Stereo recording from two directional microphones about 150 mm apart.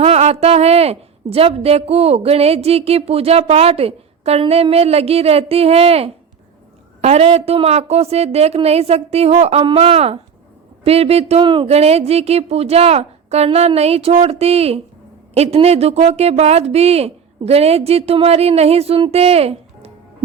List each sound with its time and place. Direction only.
0.0 s a woman's voice: 45° right (ahead or behind)